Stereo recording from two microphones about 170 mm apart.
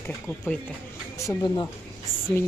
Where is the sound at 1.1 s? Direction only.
20° left (ahead or behind).